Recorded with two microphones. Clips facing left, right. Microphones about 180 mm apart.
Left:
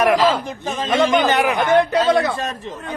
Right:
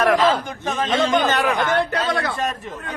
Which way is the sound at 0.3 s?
10° left (ahead or behind).